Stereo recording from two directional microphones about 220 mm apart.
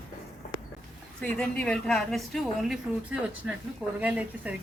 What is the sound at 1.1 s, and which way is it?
Speech, 5° left (ahead or behind).